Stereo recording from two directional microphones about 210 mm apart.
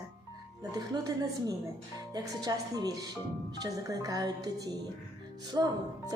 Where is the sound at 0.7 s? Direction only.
15° right (ahead or behind).